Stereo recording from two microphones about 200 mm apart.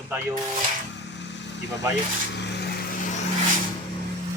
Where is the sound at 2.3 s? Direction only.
60° left (ahead or behind).